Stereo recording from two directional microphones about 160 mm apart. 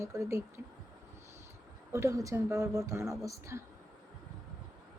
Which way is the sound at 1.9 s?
20° right (ahead or behind).